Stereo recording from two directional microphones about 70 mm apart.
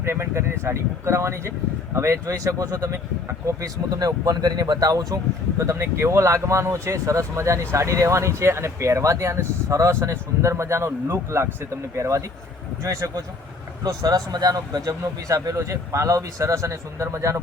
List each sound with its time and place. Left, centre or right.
0.0 s speech: right
5.5 s speech: right
13.8 s speech: right